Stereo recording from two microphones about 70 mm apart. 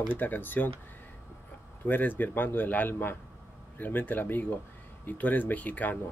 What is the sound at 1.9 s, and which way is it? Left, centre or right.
Speech, left.